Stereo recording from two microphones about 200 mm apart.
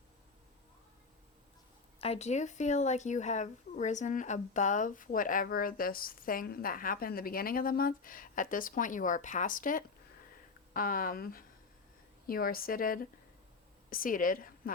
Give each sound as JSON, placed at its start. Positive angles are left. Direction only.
{"t": 2.0, "sound": "a woman's voice", "side_deg": 35}